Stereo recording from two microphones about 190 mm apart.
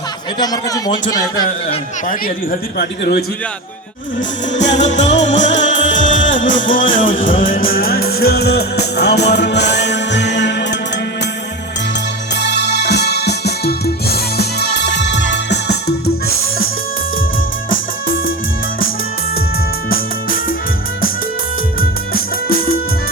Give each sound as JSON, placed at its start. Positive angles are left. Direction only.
{"t": 0.3, "sound": "speech", "side_deg": 20}
{"t": 1.5, "sound": "speech", "side_deg": 45}
{"t": 4.2, "sound": "music", "side_deg": 40}
{"t": 18.1, "sound": "music", "side_deg": 90}
{"t": 19.9, "sound": "music", "side_deg": 50}
{"t": 21.8, "sound": "music", "side_deg": 50}